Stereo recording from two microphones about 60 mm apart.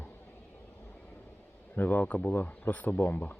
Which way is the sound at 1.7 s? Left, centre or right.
Left.